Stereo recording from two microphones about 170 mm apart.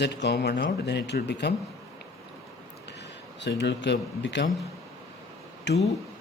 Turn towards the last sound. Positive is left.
turn(degrees=90)